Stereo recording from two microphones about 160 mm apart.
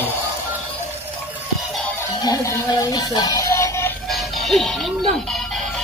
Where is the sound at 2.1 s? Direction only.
20° left (ahead or behind).